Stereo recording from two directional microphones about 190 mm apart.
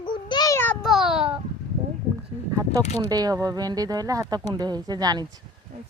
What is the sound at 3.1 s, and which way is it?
Speech, 20° right (ahead or behind).